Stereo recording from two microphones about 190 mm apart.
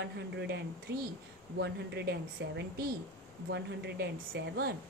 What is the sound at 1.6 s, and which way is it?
A woman's voice, 60° right (ahead or behind).